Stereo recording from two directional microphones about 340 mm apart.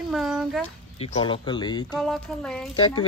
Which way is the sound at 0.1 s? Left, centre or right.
Centre.